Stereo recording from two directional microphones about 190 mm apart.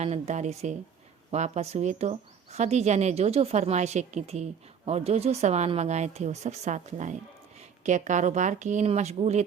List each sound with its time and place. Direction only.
0.0 s speech: 35° right (ahead or behind)